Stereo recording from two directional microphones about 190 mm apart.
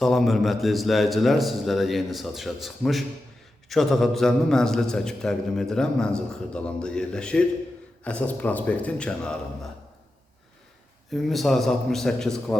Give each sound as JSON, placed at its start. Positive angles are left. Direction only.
{"t": 0.0, "sound": "a man's voice", "side_deg": 0}
{"t": 11.1, "sound": "a man's voice", "side_deg": 0}